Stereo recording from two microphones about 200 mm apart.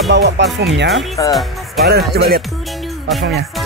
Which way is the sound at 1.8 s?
55° right (ahead or behind).